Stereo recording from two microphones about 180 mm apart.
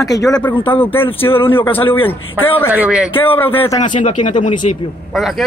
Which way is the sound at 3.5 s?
15° left (ahead or behind).